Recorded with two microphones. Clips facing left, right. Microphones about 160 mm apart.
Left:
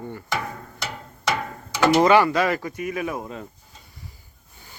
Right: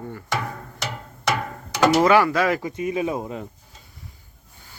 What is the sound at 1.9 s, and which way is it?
Speech, 5° right (ahead or behind).